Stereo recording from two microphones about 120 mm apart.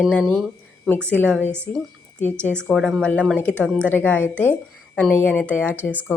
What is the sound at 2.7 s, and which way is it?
A woman's voice, centre (ahead or behind).